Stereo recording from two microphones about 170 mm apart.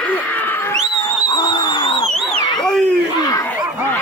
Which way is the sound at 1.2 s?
25° left (ahead or behind).